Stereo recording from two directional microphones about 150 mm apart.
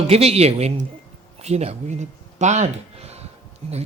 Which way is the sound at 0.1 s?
45° right (ahead or behind).